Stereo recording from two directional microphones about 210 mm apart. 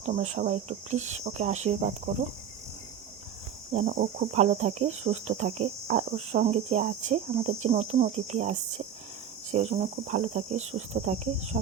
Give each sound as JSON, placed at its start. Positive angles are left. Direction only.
{"t": 0.0, "sound": "cricket", "side_deg": -30}
{"t": 3.7, "sound": "cricket", "side_deg": -35}
{"t": 11.5, "sound": "speech", "side_deg": -45}